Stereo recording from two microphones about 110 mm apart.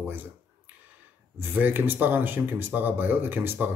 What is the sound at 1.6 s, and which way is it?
Speech, 15° right (ahead or behind).